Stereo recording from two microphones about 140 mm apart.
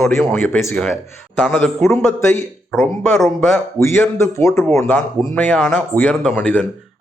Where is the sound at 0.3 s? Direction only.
15° left (ahead or behind).